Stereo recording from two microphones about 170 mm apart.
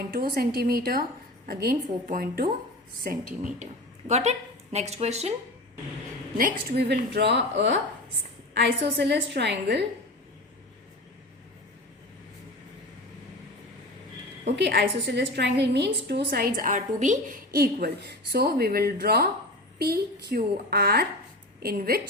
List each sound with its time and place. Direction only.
0.0 s a woman's voice: 60° right (ahead or behind)
3.6 s speech: 45° right (ahead or behind)
6.3 s a woman's voice: 60° right (ahead or behind); by 7.8 s 90° right
8.5 s a woman's voice: 80° right
14.5 s a woman's voice: 85° right; by 22.0 s 60° right (ahead or behind)